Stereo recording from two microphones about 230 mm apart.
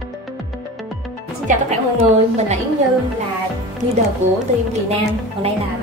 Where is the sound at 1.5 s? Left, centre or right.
Right.